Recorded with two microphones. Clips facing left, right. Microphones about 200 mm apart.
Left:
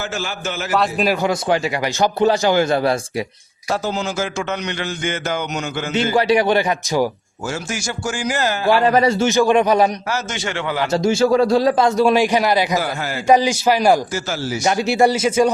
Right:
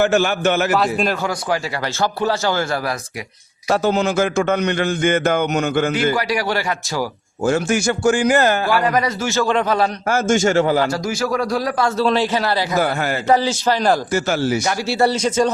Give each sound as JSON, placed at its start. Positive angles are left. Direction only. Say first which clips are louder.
{"t": 0.0, "sound": "a man's voice", "louder": "right 10 dB", "side_deg": -60}
{"t": 0.7, "sound": "a man's voice", "louder": "even", "side_deg": 0}
{"t": 1.1, "sound": "a man's voice", "louder": "left 3 dB", "side_deg": 20}
{"t": 3.7, "sound": "a man's voice", "louder": "right 5 dB", "side_deg": -60}
{"t": 6.1, "sound": "a man's voice", "louder": "left 6 dB", "side_deg": 25}
{"t": 7.4, "sound": "a man's voice", "louder": "right 8 dB", "side_deg": -55}
{"t": 8.6, "sound": "a man's voice", "louder": "left 3 dB", "side_deg": 25}
{"t": 10.1, "sound": "a man's voice", "louder": "right 8 dB", "side_deg": -50}
{"t": 10.9, "sound": "a man's voice", "louder": "left 6 dB", "side_deg": 25}
{"t": 12.8, "sound": "a man's voice", "louder": "right 4 dB", "side_deg": -55}
{"t": 13.2, "sound": "speech", "louder": "left 3 dB", "side_deg": 15}
{"t": 14.1, "sound": "a man's voice", "louder": "right 5 dB", "side_deg": -60}
{"t": 14.6, "sound": "speech", "louder": "left 3 dB", "side_deg": 20}